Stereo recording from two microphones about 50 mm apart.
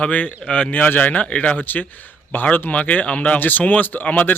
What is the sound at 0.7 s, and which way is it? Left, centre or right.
Speech, left.